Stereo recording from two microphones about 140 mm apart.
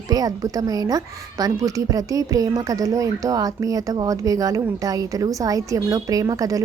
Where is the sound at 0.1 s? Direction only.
25° right (ahead or behind).